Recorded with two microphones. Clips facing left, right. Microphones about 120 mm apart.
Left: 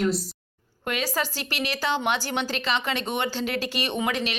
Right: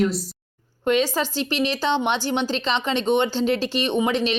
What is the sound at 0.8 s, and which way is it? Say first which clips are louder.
Speech: right 7 dB; 25° right (ahead or behind).